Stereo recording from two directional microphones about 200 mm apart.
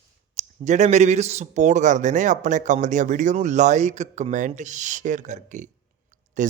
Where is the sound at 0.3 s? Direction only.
35° right (ahead or behind).